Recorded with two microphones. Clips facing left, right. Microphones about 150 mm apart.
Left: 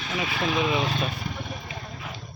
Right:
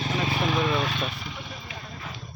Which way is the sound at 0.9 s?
40° left (ahead or behind).